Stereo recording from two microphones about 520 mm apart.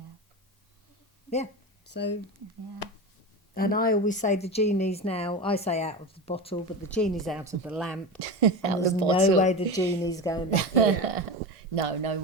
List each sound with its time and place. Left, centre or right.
1.9 s speech: centre
3.5 s a woman's voice: centre
8.2 s a woman's voice: right
9.0 s a woman's voice: centre
10.8 s a woman's voice: right
11.7 s speech: right